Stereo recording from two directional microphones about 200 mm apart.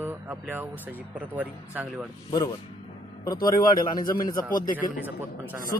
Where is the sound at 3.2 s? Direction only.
20° left (ahead or behind).